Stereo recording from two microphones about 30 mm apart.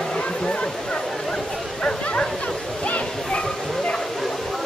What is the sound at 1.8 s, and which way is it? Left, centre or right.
Bow-wow, left.